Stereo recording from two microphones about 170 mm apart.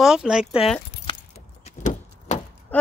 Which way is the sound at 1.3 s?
40° left (ahead or behind).